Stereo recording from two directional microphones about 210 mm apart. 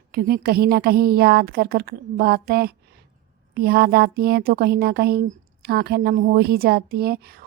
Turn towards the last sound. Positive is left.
turn(degrees=-45)  # may be behind; listen again after turning